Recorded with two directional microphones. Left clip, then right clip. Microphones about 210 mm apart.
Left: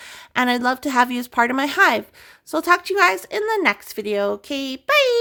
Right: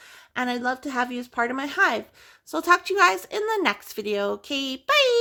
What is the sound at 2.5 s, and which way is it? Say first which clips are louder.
Speech: left 3 dB; 15° left (ahead or behind).